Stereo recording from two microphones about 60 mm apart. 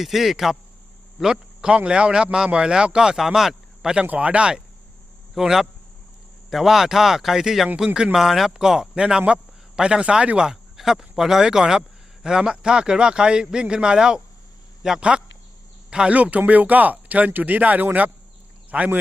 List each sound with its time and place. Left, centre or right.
0.0 s speech: centre
4.0 s speech: right
5.3 s speech: centre